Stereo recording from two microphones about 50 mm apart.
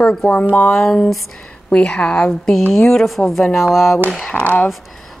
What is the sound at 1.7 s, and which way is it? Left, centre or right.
Speech, left.